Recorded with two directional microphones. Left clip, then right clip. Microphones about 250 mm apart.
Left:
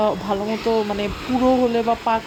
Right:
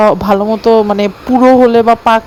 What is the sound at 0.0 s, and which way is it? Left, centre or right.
Speech, right.